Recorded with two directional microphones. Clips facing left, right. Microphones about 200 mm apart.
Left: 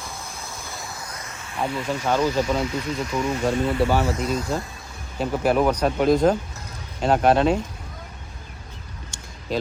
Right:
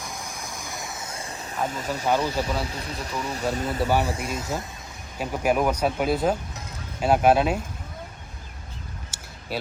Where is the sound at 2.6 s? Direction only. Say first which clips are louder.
Left 7 dB; 35° right (ahead or behind).